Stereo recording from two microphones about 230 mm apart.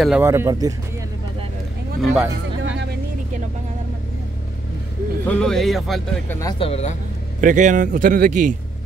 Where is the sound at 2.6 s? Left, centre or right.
Right.